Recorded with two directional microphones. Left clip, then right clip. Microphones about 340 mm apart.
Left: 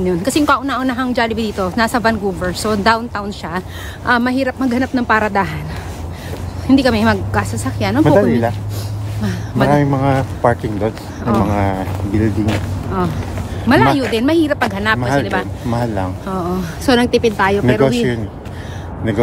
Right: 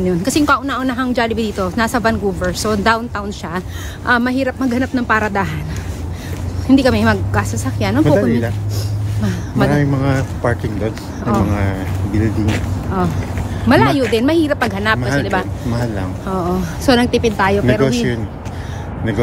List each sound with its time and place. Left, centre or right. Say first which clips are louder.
0.0 s speech: left 1 dB; centre
6.7 s speech: even; centre
8.0 s speech: left 3 dB; centre
9.2 s speech: even; centre
9.7 s speech: left 6 dB; centre
13.7 s speech: even; centre